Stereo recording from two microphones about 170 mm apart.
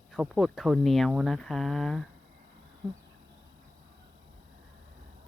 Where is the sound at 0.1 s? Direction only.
Centre (ahead or behind).